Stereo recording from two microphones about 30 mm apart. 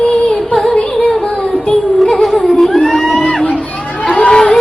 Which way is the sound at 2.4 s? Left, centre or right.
Centre.